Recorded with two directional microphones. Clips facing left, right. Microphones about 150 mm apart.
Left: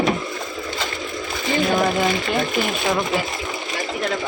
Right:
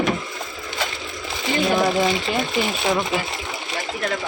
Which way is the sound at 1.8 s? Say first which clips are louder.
Even; 5° right (ahead or behind).